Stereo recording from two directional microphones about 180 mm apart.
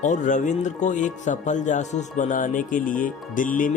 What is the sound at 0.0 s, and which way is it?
Speech, 45° left (ahead or behind).